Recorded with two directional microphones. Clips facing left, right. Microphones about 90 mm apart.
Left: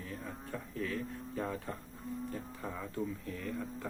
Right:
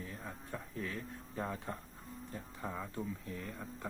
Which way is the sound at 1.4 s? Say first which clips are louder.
Left 2 dB; 25° right (ahead or behind).